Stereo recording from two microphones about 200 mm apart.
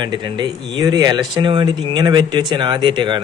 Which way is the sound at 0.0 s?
20° right (ahead or behind).